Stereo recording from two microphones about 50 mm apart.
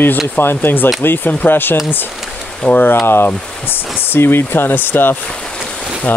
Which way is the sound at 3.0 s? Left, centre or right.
Left.